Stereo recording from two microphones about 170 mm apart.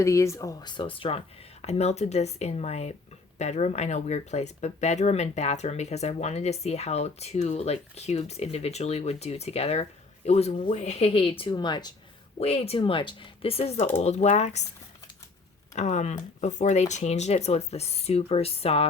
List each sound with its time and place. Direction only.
0.0 s speech: 15° left (ahead or behind)
12.4 s speech: 35° left (ahead or behind)
15.7 s speech: 45° left (ahead or behind)